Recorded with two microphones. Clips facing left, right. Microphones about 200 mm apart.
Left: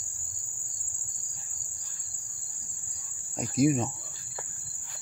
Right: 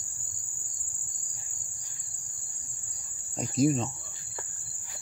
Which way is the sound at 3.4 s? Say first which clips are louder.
Left 1 dB; 10° left (ahead or behind).